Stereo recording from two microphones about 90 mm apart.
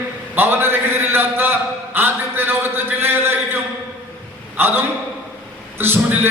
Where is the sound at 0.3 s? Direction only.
25° right (ahead or behind).